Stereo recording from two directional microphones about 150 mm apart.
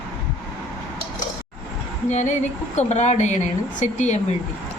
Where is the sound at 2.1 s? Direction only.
50° left (ahead or behind).